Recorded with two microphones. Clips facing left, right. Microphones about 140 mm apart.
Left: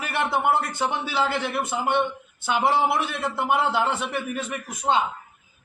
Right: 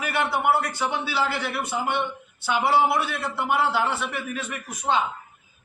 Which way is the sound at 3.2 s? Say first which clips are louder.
Left 1 dB; 15° left (ahead or behind).